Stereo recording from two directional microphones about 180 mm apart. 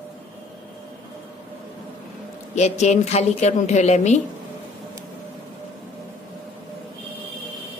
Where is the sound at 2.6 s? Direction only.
40° left (ahead or behind).